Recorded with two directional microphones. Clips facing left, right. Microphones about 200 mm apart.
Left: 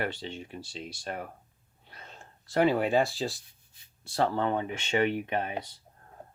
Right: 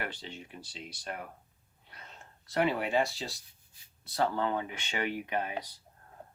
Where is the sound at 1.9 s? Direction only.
30° left (ahead or behind).